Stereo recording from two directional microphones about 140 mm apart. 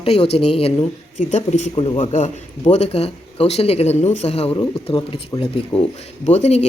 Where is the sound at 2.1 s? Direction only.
55° left (ahead or behind).